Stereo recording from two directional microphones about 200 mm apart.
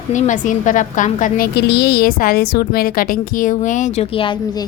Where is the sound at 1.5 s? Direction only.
55° left (ahead or behind).